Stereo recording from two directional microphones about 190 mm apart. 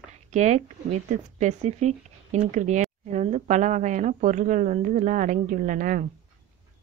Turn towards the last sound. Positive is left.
turn(degrees=-45)  # may be behind; listen again after turning